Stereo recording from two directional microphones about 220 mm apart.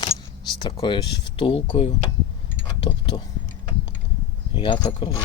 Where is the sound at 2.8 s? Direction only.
20° left (ahead or behind).